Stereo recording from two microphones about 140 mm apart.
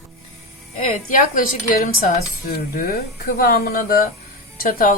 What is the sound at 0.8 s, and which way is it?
A woman's voice, 70° left (ahead or behind).